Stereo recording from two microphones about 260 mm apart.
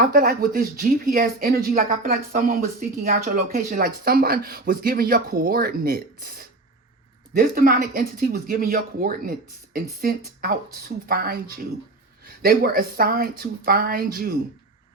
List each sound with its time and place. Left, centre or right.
0.0 s speech: right